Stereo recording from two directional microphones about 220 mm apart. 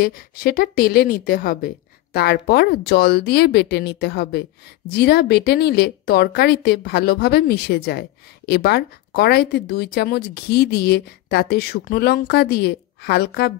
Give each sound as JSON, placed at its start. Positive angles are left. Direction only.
{"t": 0.0, "sound": "speech", "side_deg": 45}